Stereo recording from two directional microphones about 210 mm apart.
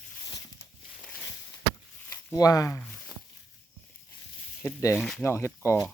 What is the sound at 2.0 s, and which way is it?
Speech, 15° left (ahead or behind).